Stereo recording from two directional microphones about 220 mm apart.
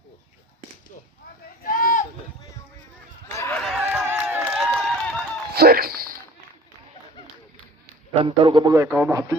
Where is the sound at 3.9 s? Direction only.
10° right (ahead or behind).